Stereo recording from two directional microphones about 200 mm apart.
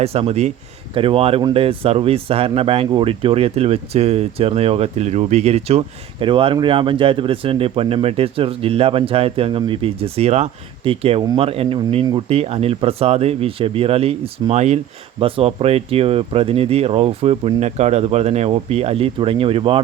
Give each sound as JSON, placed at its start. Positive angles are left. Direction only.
{"t": 0.0, "sound": "speech", "side_deg": -30}